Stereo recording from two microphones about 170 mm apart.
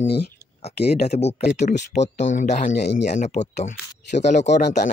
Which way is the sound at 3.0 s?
45° left (ahead or behind).